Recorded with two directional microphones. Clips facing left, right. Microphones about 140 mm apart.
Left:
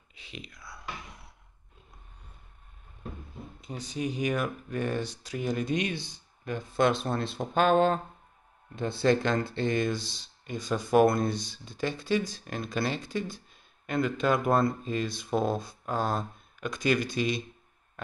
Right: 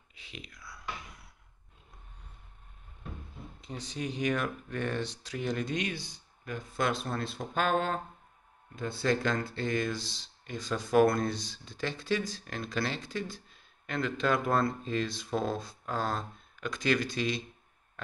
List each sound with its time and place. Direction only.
0.1 s whispering: 20° left (ahead or behind)
3.6 s speech: 10° left (ahead or behind)